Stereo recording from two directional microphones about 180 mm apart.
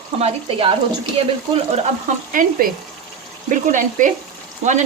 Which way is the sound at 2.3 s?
50° right (ahead or behind).